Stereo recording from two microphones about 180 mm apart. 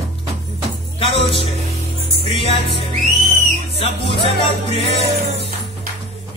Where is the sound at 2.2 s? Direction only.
30° left (ahead or behind).